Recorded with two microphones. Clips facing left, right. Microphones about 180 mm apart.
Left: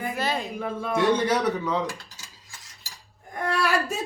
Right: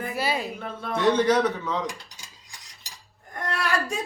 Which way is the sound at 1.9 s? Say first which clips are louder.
Left 3 dB; 15° right (ahead or behind).